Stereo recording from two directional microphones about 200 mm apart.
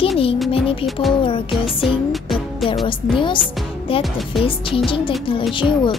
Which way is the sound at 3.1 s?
25° left (ahead or behind).